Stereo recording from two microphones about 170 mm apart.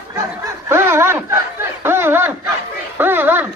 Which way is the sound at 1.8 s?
15° right (ahead or behind).